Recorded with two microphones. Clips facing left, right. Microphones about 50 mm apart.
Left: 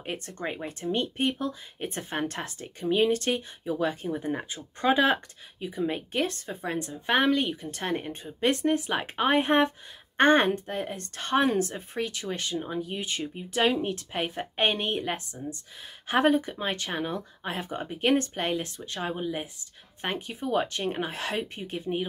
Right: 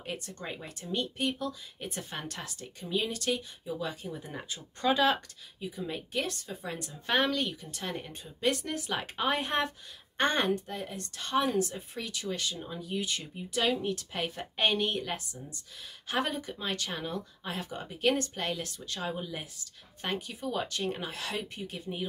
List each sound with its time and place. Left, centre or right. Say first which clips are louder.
0.0 s speech: left 5 dB; left
3.6 s speech: left 11 dB; left
5.7 s speech: left 8 dB; left
7.1 s speech: left 4 dB; left
7.7 s speech: left 7 dB; left